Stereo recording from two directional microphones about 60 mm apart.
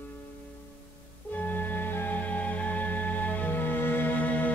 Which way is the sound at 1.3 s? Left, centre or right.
Left.